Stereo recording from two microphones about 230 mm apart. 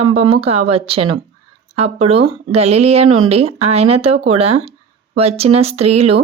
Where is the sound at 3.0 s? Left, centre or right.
Right.